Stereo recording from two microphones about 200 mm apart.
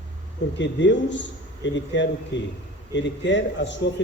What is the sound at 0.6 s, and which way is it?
A man's voice, 65° left (ahead or behind).